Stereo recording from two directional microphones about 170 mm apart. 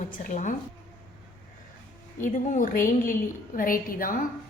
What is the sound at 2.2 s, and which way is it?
A woman's voice, 50° left (ahead or behind).